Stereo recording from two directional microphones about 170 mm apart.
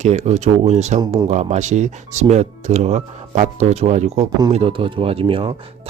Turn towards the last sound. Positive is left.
turn(degrees=-30)  # may be behind; listen again after turning